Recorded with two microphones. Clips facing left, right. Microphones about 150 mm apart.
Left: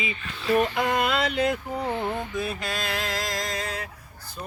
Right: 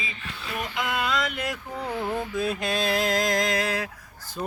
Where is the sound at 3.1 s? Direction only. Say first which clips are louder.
Right 6 dB; 50° right (ahead or behind); by 3.8 s 75° right (ahead or behind).